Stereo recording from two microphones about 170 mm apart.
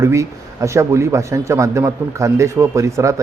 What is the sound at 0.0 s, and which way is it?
Speech, 15° right (ahead or behind).